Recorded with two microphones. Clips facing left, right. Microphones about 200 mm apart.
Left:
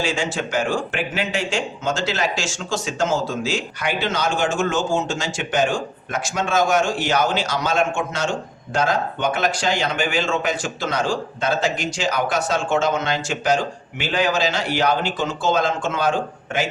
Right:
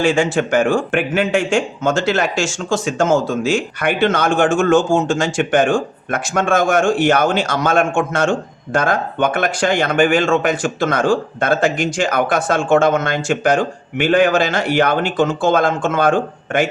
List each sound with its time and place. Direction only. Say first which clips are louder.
0.0 s speech: right 8 dB; 55° right (ahead or behind)